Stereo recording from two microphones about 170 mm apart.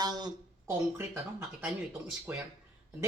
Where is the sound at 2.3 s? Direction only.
10° right (ahead or behind).